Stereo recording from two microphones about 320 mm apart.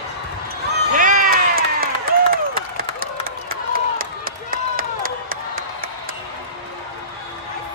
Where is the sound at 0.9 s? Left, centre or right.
Right.